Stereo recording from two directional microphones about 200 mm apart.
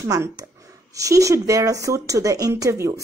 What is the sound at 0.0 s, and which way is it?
A woman's voice, 15° right (ahead or behind).